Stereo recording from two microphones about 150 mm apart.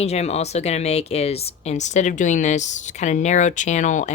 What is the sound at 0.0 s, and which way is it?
Speech, 45° left (ahead or behind).